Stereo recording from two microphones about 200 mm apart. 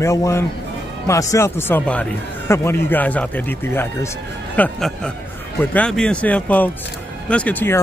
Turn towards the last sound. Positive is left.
turn(degrees=10)  # may be behind; listen again after turning